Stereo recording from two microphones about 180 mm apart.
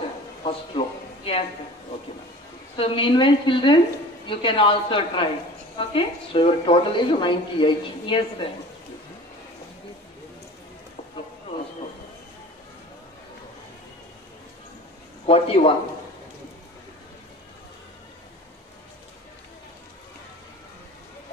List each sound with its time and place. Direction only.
0.4 s speech: 35° left (ahead or behind)
2.7 s a woman's voice: 30° left (ahead or behind)
15.2 s a sound: 30° left (ahead or behind)